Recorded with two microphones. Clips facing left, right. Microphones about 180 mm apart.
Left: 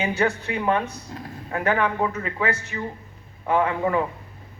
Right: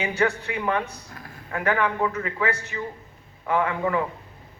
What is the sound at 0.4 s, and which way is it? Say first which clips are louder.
Speech: left 3 dB; 25° left (ahead or behind).